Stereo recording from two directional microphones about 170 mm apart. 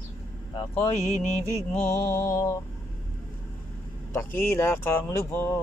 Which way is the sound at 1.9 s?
15° left (ahead or behind).